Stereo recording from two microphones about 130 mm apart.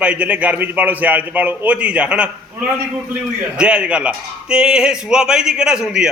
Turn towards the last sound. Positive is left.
turn(degrees=-5)  # may be behind; listen again after turning